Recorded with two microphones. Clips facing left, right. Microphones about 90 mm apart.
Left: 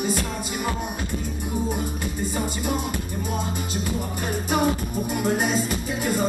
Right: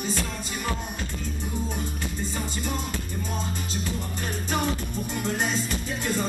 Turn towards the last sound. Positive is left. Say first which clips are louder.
# left 4 dB
turn(degrees=10)  # may be behind; listen again after turning